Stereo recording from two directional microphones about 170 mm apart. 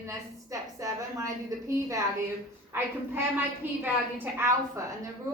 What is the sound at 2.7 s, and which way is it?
A woman's voice, 10° right (ahead or behind).